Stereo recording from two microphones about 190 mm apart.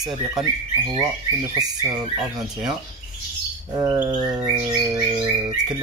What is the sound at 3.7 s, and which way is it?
Bird, 15° right (ahead or behind).